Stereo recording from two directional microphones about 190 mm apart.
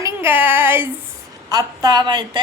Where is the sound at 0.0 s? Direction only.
10° right (ahead or behind).